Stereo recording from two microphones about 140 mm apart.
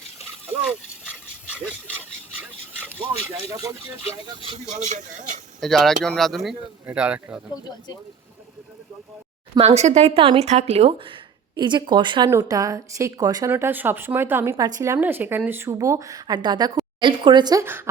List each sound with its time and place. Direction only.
0.6 s dog: 10° right (ahead or behind)
4.4 s speech: 40° right (ahead or behind)
4.7 s a man's voice: 55° right (ahead or behind)
5.5 s speech: centre (ahead or behind)
9.6 s a woman's voice: 50° right (ahead or behind); by 12.3 s 35° right (ahead or behind)
12.3 s speech: 20° right (ahead or behind)
13.5 s speech: 15° right (ahead or behind)